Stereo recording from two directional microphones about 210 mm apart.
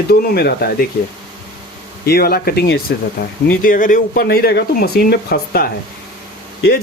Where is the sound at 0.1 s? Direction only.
50° left (ahead or behind).